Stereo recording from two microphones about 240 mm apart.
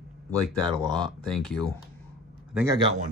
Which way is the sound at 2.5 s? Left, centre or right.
Centre.